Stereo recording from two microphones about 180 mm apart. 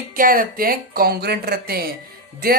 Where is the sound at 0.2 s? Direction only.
50° right (ahead or behind).